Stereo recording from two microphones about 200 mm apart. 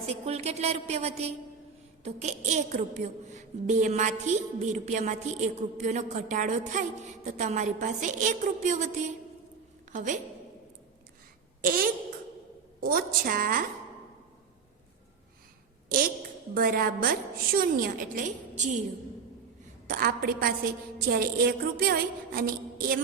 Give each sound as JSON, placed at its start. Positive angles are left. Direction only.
{"t": 0.0, "sound": "a woman's voice", "side_deg": -30}
{"t": 9.9, "sound": "a woman's voice", "side_deg": -40}
{"t": 11.6, "sound": "a woman's voice", "side_deg": -45}
{"t": 15.9, "sound": "a woman's voice", "side_deg": -45}
{"t": 19.9, "sound": "a woman's voice", "side_deg": -45}